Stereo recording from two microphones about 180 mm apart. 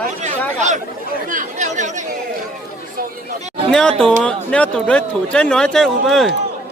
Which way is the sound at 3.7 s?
5° left (ahead or behind).